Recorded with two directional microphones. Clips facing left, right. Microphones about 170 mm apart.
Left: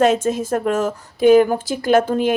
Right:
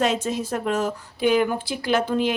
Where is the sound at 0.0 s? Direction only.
50° left (ahead or behind).